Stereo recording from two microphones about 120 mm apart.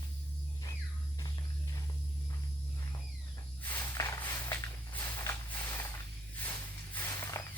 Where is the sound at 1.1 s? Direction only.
35° left (ahead or behind).